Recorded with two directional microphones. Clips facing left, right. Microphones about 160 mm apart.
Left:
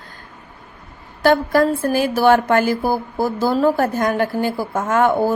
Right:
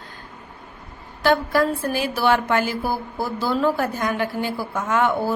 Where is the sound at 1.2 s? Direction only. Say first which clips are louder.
Left 4 dB; 45° left (ahead or behind).